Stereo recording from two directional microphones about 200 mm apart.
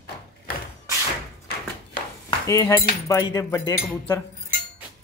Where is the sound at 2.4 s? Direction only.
15° left (ahead or behind).